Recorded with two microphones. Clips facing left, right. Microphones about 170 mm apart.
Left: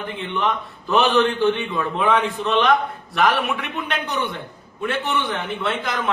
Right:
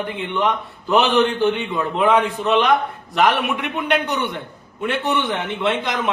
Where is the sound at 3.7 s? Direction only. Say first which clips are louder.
Right 5 dB; 20° right (ahead or behind).